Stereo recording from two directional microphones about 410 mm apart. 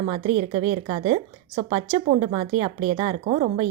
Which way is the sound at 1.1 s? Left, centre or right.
Centre.